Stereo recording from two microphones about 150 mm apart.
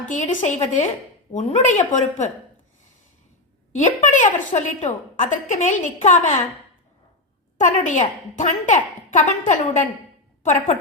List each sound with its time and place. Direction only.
0.1 s a woman's voice: 55° left (ahead or behind)
3.7 s a woman's voice: 60° left (ahead or behind)
7.6 s a woman's voice: 55° left (ahead or behind)